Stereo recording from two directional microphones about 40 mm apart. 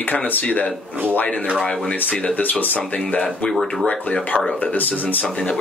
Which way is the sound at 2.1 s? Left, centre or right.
Left.